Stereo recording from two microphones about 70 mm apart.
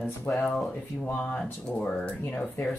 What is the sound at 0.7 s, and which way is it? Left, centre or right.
Speech, centre.